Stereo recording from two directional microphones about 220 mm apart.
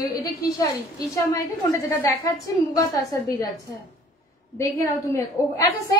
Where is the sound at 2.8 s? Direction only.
15° left (ahead or behind).